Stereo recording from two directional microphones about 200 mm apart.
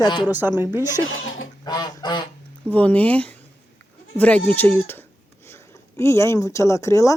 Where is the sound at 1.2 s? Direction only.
75° left (ahead or behind).